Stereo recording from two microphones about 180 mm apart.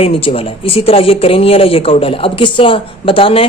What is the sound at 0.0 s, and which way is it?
Speech, 30° left (ahead or behind).